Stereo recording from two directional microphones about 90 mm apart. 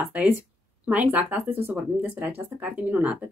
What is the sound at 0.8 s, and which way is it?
Speech, 15° right (ahead or behind).